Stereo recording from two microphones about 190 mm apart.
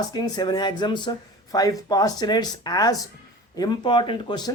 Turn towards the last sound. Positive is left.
turn(degrees=25)  # may be behind; listen again after turning